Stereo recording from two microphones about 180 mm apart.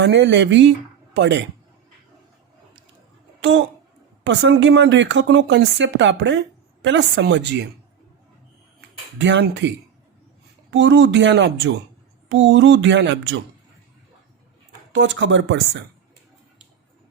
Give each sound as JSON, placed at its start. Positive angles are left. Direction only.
{"t": 0.0, "sound": "speech", "side_deg": -75}
{"t": 4.2, "sound": "speech", "side_deg": -90}
{"t": 9.1, "sound": "speech", "side_deg": -80}
{"t": 14.9, "sound": "speech", "side_deg": -90}